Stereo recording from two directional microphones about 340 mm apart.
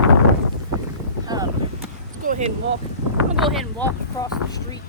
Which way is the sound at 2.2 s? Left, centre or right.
Right.